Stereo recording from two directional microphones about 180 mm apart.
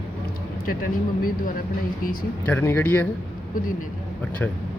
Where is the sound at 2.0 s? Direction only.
50° left (ahead or behind).